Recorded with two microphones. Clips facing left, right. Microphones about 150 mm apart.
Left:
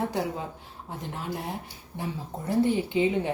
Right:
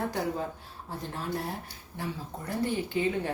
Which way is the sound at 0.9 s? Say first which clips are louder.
Even; 20° left (ahead or behind).